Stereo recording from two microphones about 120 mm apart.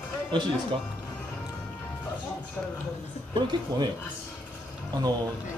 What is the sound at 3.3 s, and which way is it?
Speech, 40° right (ahead or behind).